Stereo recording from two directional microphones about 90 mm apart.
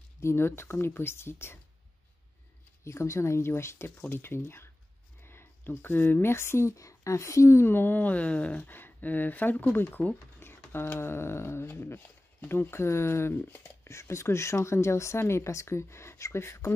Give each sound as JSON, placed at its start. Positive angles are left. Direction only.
{"t": 0.2, "sound": "speech", "side_deg": 30}
{"t": 2.8, "sound": "speech", "side_deg": 30}